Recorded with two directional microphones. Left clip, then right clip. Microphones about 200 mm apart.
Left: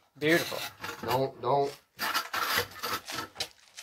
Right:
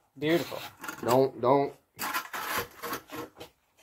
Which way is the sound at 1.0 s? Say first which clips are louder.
Right 5 dB; 55° right (ahead or behind).